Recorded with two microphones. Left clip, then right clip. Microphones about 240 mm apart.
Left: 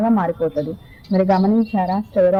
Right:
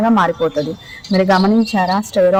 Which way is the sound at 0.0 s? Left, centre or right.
Right.